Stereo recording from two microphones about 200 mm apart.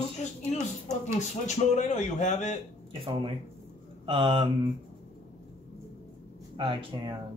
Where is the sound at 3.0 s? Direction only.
25° right (ahead or behind).